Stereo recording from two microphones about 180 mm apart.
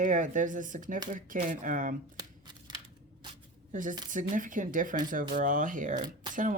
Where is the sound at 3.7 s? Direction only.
45° right (ahead or behind).